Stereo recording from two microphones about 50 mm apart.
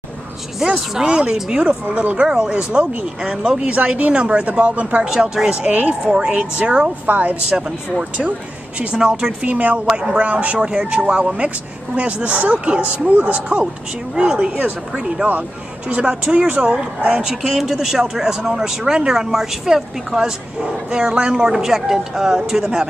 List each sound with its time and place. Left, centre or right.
0.6 s speech: centre; by 2.2 s right
2.2 s speech: centre
2.5 s speech: right
5.0 s speech: centre
7.1 s speech: right
8.7 s speech: centre
9.5 s speech: right
14.1 s speech: centre
15.9 s speech: right
17.6 s speech: centre